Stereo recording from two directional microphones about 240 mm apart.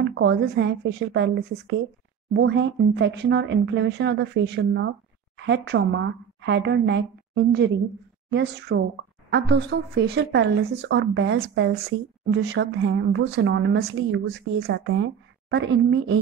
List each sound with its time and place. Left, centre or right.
0.0 s speech: right